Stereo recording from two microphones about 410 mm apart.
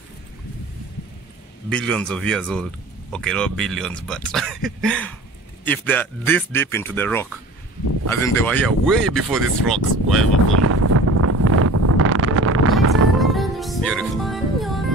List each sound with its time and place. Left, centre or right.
1.7 s speech: centre
8.4 s speech: centre
10.6 s wind noise: right
13.2 s music: centre